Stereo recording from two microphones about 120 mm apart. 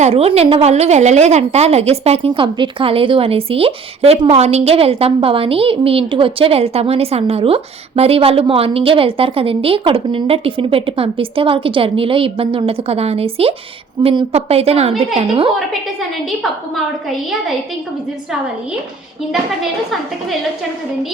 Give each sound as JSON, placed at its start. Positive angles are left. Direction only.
{"t": 0.0, "sound": "a woman's voice", "side_deg": -55}
{"t": 15.3, "sound": "a woman's voice", "side_deg": -45}
{"t": 15.5, "sound": "a woman's voice", "side_deg": 0}